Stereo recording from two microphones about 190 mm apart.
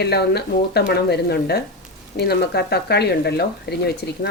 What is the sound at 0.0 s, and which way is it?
Speech, 60° left (ahead or behind).